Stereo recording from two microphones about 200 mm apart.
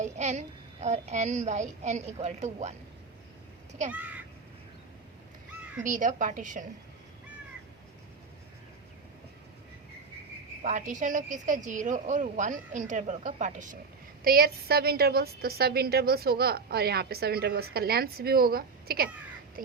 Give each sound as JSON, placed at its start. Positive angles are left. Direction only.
{"t": 0.0, "sound": "a woman's voice", "side_deg": -35}
{"t": 3.9, "sound": "speech", "side_deg": -10}
{"t": 5.8, "sound": "a woman's voice", "side_deg": -40}
{"t": 10.6, "sound": "a woman's voice", "side_deg": -40}
{"t": 19.6, "sound": "duck", "side_deg": -45}